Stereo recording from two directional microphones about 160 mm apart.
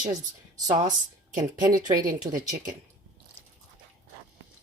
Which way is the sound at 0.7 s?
50° right (ahead or behind).